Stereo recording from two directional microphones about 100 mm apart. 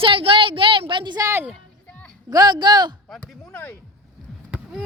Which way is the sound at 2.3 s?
45° right (ahead or behind).